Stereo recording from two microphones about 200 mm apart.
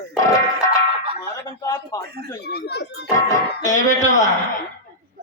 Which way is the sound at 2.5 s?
55° left (ahead or behind).